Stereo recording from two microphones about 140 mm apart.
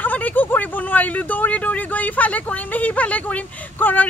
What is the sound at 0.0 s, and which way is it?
Speech, 10° left (ahead or behind).